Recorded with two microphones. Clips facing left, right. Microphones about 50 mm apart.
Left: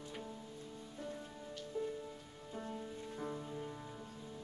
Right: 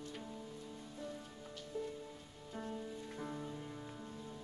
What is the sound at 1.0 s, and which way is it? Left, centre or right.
Music, left.